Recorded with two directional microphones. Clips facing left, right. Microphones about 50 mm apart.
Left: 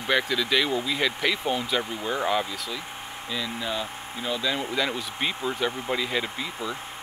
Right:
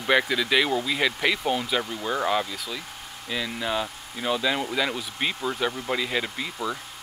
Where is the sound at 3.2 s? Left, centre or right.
Centre.